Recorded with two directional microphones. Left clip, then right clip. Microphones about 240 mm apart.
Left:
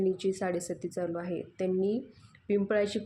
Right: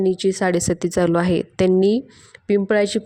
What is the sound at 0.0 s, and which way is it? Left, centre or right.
A woman's voice, right.